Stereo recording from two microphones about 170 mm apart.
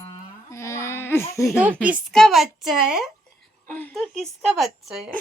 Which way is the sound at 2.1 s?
Centre (ahead or behind).